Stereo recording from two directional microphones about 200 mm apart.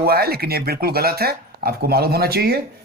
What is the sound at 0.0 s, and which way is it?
Speech, 50° right (ahead or behind).